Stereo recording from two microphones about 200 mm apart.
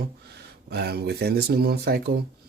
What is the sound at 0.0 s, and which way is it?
Speech, 55° right (ahead or behind).